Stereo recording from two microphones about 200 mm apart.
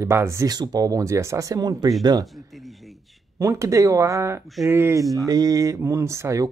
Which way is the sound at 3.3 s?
15° right (ahead or behind).